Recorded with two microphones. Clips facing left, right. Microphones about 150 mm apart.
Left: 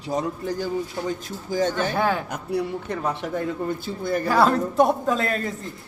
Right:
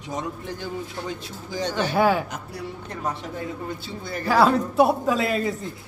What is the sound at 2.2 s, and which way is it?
A man's voice, 55° left (ahead or behind).